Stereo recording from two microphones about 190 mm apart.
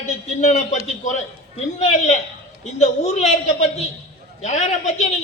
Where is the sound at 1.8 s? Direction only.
35° left (ahead or behind).